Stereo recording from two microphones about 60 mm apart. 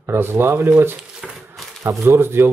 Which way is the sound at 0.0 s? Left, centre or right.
Right.